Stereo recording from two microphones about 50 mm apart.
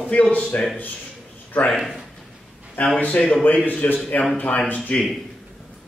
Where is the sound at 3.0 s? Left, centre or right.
Left.